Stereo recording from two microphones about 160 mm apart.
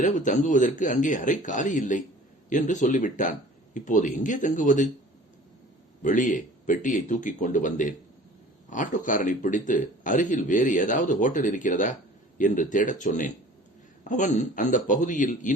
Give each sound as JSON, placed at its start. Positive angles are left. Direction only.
{"t": 0.0, "sound": "a man's voice", "side_deg": 55}
{"t": 6.0, "sound": "a man's voice", "side_deg": 55}